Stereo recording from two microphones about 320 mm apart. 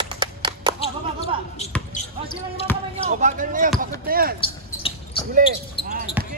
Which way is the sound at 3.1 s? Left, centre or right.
Right.